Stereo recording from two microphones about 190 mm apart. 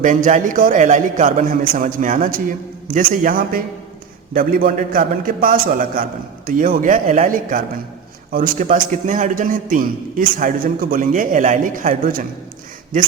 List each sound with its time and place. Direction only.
0.0 s a man's voice: 40° right (ahead or behind)